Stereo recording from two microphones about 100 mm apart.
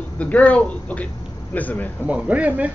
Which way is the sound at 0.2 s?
15° left (ahead or behind).